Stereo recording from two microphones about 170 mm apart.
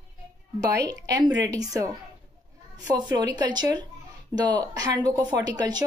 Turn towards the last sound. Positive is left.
turn(degrees=-25)  # may be behind; listen again after turning